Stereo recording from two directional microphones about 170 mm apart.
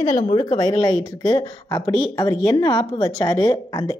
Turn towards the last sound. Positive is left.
turn(degrees=20)  # may be behind; listen again after turning